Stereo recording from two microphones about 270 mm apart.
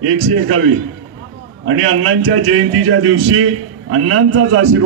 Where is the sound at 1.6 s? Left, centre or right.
Right.